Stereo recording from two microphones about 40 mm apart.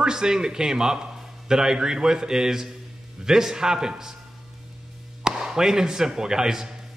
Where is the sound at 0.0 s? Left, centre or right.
Centre.